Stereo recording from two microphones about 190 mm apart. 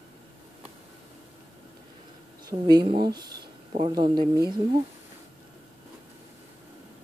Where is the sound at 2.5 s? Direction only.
20° right (ahead or behind).